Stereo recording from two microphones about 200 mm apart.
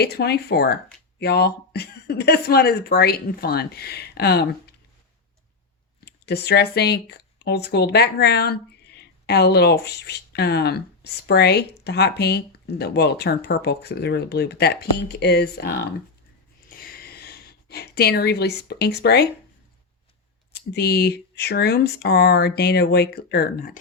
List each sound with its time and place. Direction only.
0.0 s speech: 55° left (ahead or behind)
6.1 s speech: 55° left (ahead or behind)
16.6 s a sound: 50° left (ahead or behind)
20.5 s speech: 55° left (ahead or behind)